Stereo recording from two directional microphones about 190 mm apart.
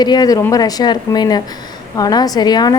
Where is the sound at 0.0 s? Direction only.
20° left (ahead or behind).